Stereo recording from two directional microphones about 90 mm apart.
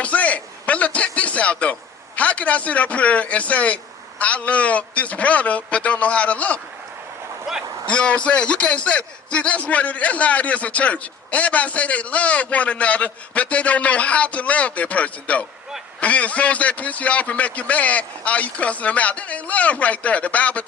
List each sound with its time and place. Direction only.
0.0 s a man's voice: 15° left (ahead or behind)
7.5 s speech: 5° right (ahead or behind)
7.9 s a man's voice: 15° left (ahead or behind)